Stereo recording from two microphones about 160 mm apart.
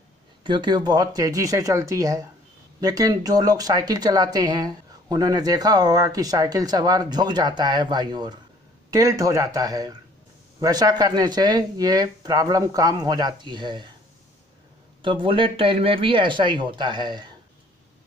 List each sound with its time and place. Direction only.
0.4 s speech: 30° right (ahead or behind)
15.0 s speech: 30° right (ahead or behind)